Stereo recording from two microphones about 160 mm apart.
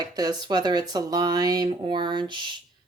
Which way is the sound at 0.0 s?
25° right (ahead or behind).